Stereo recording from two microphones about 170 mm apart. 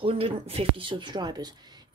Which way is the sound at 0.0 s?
35° right (ahead or behind).